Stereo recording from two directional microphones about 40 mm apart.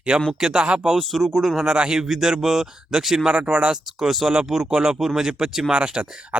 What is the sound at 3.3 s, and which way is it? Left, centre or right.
Speech, right.